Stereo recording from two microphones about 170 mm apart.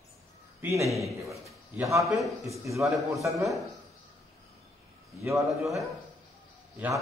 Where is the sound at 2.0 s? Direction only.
Centre (ahead or behind).